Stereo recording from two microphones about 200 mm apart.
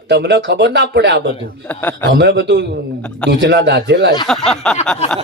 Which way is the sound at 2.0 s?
60° right (ahead or behind).